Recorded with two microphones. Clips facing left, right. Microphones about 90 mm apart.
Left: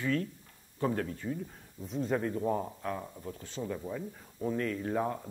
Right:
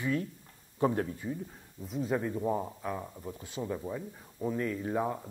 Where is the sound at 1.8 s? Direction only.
5° right (ahead or behind).